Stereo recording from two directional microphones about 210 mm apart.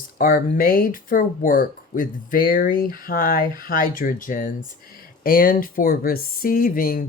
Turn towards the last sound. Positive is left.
turn(degrees=45)  # may be behind; listen again after turning